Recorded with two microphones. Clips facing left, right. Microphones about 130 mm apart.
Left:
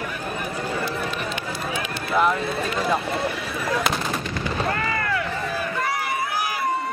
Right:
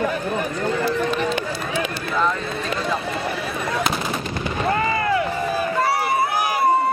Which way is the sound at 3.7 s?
Centre (ahead or behind).